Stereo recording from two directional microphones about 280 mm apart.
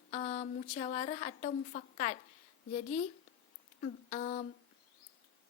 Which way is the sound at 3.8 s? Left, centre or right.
Left.